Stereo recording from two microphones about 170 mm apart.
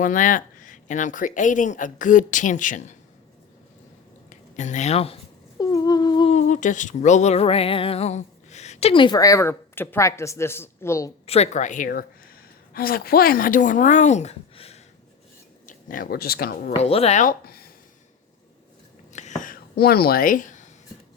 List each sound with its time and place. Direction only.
0.0 s speech: 50° left (ahead or behind)
4.3 s speech: 45° left (ahead or behind)
5.5 s a sound: 20° left (ahead or behind)
6.3 s speech: 45° left (ahead or behind); by 11.1 s 15° left (ahead or behind)
11.3 s a woman's voice: 40° left (ahead or behind)
15.6 s speech: 55° left (ahead or behind)
16.7 s speech: 35° left (ahead or behind); by 17.7 s 60° left (ahead or behind)
19.1 s a sound: 45° left (ahead or behind)